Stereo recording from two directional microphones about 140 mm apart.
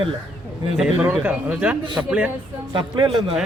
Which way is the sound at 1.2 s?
10° right (ahead or behind).